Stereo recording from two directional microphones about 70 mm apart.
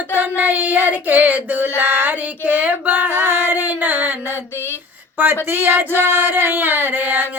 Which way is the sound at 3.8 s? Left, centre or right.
Right.